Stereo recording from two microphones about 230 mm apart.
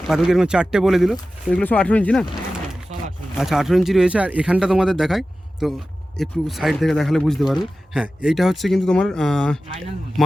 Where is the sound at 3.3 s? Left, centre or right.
Centre.